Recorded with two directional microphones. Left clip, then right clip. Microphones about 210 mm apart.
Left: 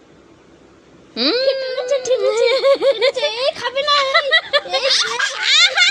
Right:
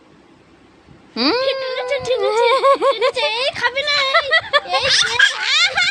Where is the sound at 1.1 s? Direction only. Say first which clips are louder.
Left 1 dB; 25° right (ahead or behind).